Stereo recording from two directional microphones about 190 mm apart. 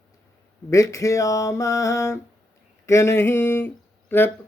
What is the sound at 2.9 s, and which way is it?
Speech, 15° left (ahead or behind).